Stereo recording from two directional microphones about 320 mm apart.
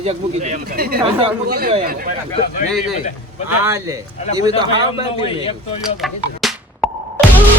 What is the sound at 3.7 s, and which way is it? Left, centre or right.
Speech, centre.